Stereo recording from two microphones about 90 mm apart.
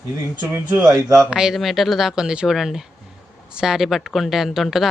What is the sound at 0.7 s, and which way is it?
Speech, 10° right (ahead or behind).